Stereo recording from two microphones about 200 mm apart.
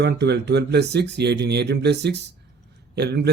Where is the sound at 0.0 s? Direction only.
55° right (ahead or behind).